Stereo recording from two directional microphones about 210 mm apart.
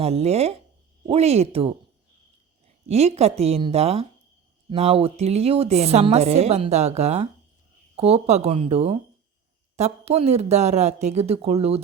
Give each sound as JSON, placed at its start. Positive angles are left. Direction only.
{"t": 0.0, "sound": "a woman's voice", "side_deg": -30}
{"t": 2.8, "sound": "a woman's voice", "side_deg": -30}